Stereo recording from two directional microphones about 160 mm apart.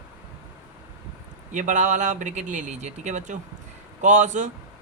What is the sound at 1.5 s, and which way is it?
Speech, 50° right (ahead or behind).